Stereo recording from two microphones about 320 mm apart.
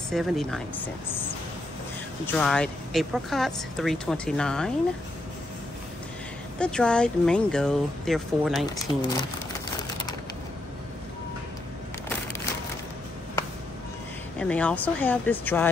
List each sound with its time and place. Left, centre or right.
0.1 s speech: centre
2.2 s speech: centre
6.6 s speech: centre
8.6 s speech: centre
14.4 s speech: centre